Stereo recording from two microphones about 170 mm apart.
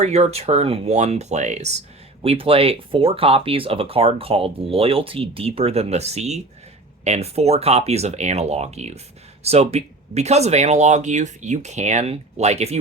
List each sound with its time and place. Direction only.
0.0 s speech: 40° right (ahead or behind)